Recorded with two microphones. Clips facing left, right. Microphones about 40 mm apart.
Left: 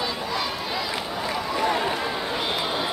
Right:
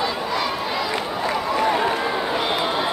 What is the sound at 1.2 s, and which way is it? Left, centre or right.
Run, centre.